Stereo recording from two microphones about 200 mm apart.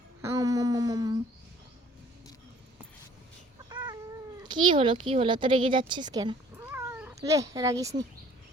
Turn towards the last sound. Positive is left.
turn(degrees=-15)  # may be behind; listen again after turning